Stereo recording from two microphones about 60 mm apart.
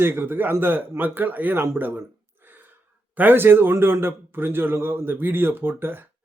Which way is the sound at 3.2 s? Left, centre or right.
Right.